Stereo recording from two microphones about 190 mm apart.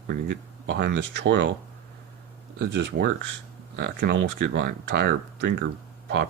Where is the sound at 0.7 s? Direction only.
65° right (ahead or behind).